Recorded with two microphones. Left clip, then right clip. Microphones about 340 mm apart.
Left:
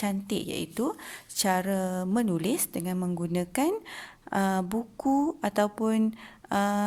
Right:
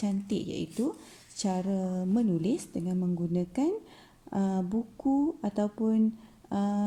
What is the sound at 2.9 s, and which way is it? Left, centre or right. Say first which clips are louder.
Speech: right 1 dB; left.